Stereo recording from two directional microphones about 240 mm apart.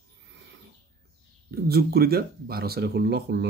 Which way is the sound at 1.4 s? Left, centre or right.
Right.